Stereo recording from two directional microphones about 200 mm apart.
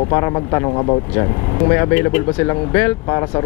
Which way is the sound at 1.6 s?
15° left (ahead or behind).